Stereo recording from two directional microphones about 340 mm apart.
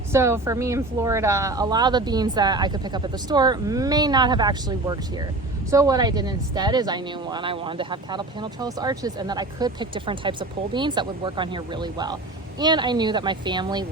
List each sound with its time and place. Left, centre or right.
0.1 s speech: centre